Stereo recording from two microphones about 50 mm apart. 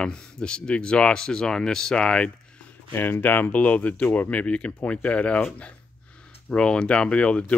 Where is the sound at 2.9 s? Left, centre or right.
Left.